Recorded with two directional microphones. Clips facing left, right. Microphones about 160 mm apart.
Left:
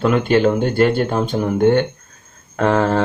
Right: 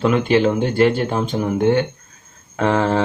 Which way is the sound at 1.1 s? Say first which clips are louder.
Left 1 dB; 10° right (ahead or behind).